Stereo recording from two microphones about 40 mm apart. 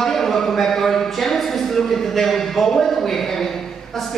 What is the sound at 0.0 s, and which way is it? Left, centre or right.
A man's voice, centre.